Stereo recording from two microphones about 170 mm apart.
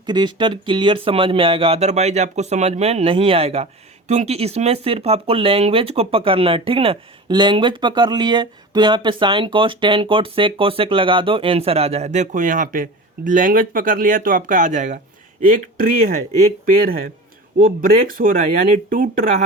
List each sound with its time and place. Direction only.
0.0 s speech: 25° right (ahead or behind); by 19.3 s 55° right (ahead or behind)